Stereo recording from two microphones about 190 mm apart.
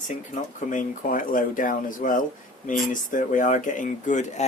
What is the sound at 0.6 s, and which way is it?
Speech, 45° left (ahead or behind).